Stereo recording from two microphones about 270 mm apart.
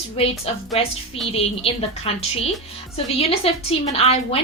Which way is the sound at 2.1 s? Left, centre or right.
Left.